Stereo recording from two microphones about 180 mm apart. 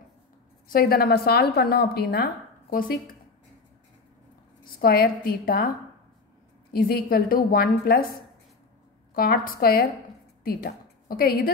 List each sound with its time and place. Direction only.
0.7 s a woman's voice: 55° left (ahead or behind)
4.6 s a woman's voice: 55° left (ahead or behind)
6.7 s a woman's voice: 55° left (ahead or behind)